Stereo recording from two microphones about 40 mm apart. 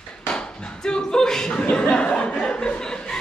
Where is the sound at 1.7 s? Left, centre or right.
Left.